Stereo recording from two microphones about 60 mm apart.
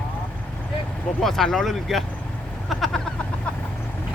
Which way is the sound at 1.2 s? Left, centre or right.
Centre.